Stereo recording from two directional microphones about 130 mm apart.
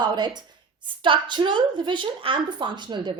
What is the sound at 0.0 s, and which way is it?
A woman's voice, 35° right (ahead or behind).